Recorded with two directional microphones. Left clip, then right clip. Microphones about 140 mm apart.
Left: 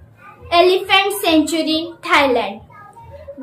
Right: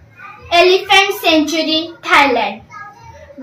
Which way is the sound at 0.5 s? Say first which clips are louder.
Right 3 dB; 20° left (ahead or behind).